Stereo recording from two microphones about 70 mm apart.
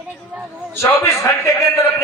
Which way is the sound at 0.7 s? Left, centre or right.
Left.